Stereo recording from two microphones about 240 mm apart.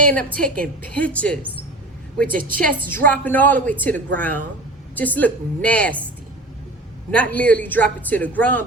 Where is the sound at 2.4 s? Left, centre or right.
Right.